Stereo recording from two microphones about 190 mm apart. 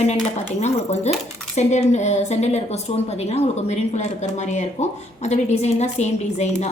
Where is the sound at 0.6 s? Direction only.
35° left (ahead or behind).